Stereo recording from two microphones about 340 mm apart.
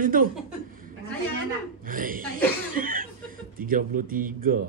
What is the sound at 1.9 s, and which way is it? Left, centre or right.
Chuckle, right.